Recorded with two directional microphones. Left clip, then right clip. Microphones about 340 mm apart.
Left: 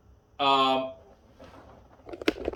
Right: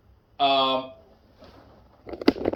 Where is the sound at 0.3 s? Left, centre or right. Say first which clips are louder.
Right 2 dB; centre.